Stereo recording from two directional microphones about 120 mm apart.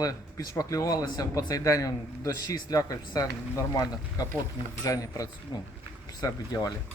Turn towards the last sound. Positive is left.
turn(degrees=30)  # may be behind; listen again after turning